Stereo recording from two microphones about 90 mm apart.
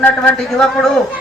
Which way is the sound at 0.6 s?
5° left (ahead or behind).